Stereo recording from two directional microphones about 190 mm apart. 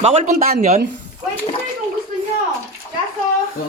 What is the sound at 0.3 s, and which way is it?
Speech, 50° right (ahead or behind).